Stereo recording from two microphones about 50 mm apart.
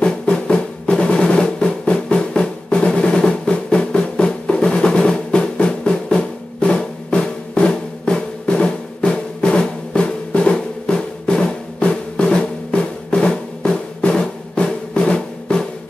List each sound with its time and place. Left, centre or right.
0.0 s drum: centre